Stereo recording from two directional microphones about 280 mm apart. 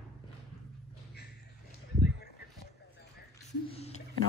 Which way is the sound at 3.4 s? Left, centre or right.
Left.